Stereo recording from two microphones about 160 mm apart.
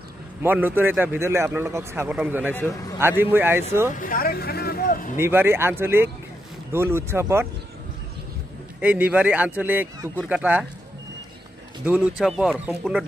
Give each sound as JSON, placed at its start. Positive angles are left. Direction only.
{"t": 0.4, "sound": "a man's voice", "side_deg": -10}
{"t": 4.0, "sound": "vehicle", "side_deg": 65}
{"t": 5.2, "sound": "a man's voice", "side_deg": -15}
{"t": 8.8, "sound": "a man's voice", "side_deg": -10}
{"t": 11.8, "sound": "a man's voice", "side_deg": -10}